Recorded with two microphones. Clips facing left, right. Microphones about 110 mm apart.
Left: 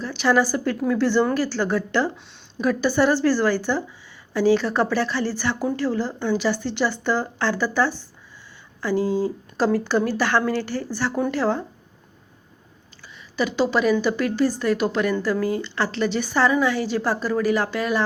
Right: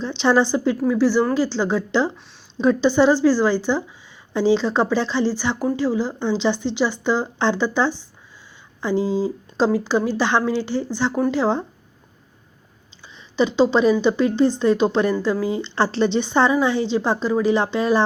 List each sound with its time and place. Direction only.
0.0 s a woman's voice: 25° right (ahead or behind)
0.8 s a woman's voice: 10° right (ahead or behind)
13.3 s a woman's voice: 25° right (ahead or behind)
15.7 s a woman's voice: 30° right (ahead or behind)